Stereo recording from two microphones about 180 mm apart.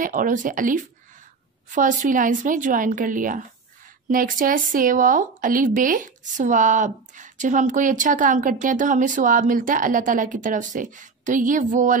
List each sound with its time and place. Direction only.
0.0 s speech: 50° right (ahead or behind)